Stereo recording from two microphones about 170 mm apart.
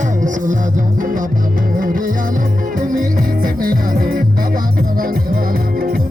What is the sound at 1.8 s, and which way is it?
Music, 55° right (ahead or behind).